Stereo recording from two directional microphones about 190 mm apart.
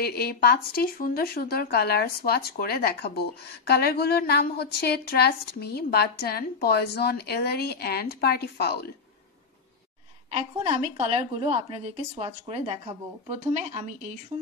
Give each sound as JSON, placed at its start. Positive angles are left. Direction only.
{"t": 0.0, "sound": "speech", "side_deg": 55}
{"t": 10.3, "sound": "a woman's voice", "side_deg": -30}